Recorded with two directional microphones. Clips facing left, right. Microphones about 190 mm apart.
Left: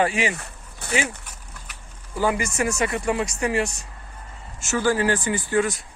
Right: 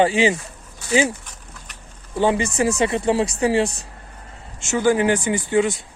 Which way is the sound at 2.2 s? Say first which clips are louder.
Right 4 dB; 30° right (ahead or behind).